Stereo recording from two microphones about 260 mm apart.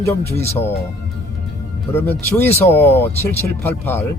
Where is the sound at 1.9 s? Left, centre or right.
Centre.